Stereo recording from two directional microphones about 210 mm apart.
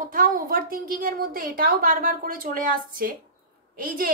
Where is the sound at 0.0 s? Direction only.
40° right (ahead or behind).